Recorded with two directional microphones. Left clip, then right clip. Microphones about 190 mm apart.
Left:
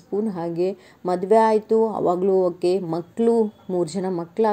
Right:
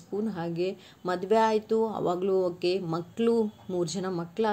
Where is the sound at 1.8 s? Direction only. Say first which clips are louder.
Left 7 dB; 10° right (ahead or behind).